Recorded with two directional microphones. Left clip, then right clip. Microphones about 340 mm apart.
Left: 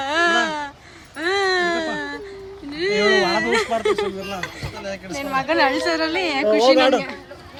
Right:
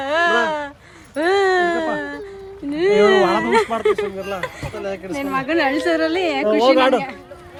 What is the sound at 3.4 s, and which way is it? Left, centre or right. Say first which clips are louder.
Speech: right 3 dB; centre.